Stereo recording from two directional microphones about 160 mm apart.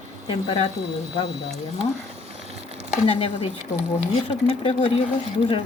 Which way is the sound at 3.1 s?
35° left (ahead or behind).